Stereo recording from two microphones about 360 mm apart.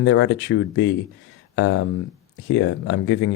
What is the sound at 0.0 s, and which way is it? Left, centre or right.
Speech, left.